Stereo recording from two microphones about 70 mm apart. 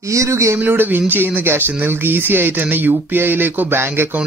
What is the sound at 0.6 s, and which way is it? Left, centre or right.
Speech, right.